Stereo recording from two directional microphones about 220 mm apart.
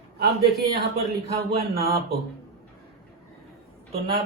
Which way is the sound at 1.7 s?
45° right (ahead or behind).